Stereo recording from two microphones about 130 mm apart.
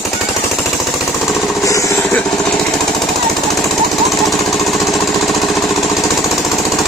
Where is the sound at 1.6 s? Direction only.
25° left (ahead or behind).